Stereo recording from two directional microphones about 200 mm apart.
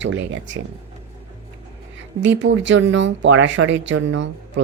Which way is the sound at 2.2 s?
65° right (ahead or behind).